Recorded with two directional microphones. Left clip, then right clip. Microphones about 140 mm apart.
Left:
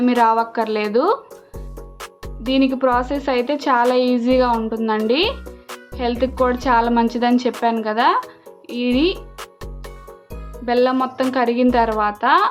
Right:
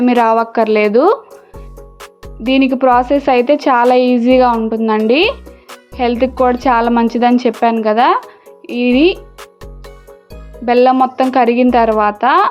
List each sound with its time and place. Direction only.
0.0 s a woman's voice: 45° right (ahead or behind)
1.5 s music: centre (ahead or behind)
2.5 s a woman's voice: 45° right (ahead or behind)
9.4 s music: centre (ahead or behind)
10.7 s a woman's voice: 45° right (ahead or behind)